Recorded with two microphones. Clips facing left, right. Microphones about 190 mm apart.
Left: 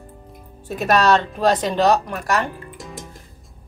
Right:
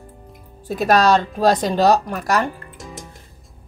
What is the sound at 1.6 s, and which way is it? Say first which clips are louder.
Speech: right 1 dB; 40° right (ahead or behind).